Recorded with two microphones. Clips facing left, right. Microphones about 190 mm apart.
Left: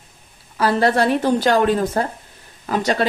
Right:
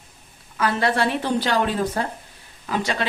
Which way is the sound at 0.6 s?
35° left (ahead or behind).